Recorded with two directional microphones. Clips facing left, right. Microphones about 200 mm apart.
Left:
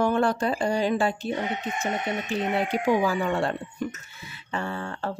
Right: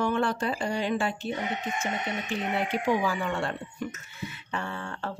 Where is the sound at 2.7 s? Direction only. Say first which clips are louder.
Left 3 dB; 40° left (ahead or behind).